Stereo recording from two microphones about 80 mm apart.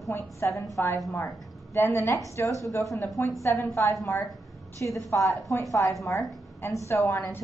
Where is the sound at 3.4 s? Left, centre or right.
Left.